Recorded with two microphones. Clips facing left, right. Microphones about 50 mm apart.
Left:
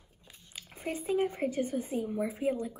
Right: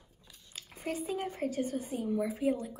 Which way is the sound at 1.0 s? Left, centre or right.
Left.